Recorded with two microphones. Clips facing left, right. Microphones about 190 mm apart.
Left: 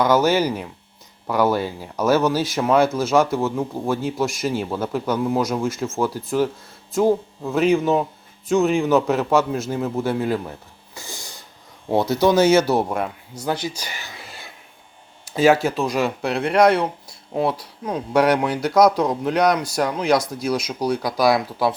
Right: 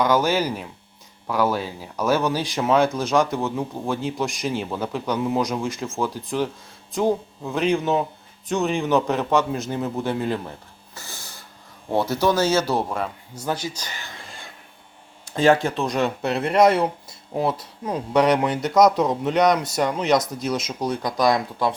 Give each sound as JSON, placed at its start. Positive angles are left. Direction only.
{"t": 0.3, "sound": "a man's voice", "side_deg": 10}
{"t": 6.9, "sound": "speech", "side_deg": 5}
{"t": 10.9, "sound": "a sound", "side_deg": 15}
{"t": 11.9, "sound": "a man's voice", "side_deg": 10}
{"t": 13.7, "sound": "a sound", "side_deg": 10}
{"t": 15.4, "sound": "speech", "side_deg": 5}